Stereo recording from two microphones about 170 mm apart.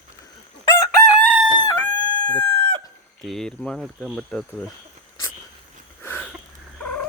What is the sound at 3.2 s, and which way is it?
Speech, centre (ahead or behind).